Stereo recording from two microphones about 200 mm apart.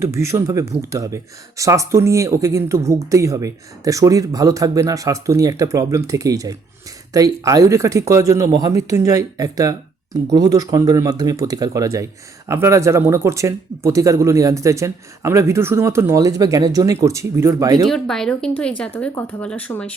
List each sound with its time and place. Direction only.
0.0 s speech: 15° right (ahead or behind)
17.8 s speech: centre (ahead or behind)